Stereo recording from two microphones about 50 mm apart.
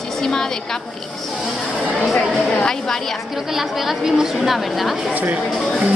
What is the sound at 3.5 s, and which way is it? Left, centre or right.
A woman's voice, centre.